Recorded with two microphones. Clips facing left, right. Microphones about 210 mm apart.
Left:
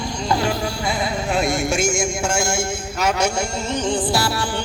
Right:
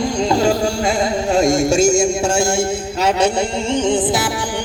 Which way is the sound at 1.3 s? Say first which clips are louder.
Right 7 dB; 40° right (ahead or behind).